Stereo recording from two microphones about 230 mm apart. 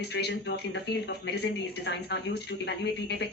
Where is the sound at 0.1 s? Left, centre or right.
Left.